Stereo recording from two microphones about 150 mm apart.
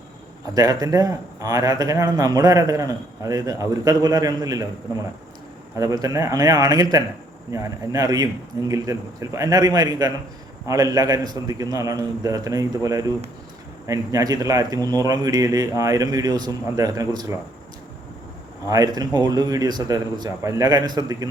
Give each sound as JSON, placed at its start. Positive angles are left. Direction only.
{"t": 0.5, "sound": "a man's voice", "side_deg": -25}
{"t": 5.7, "sound": "a man's voice", "side_deg": -25}
{"t": 18.7, "sound": "a man's voice", "side_deg": -25}